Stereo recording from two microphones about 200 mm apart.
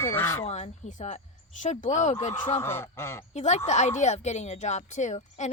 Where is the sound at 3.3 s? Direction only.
35° left (ahead or behind).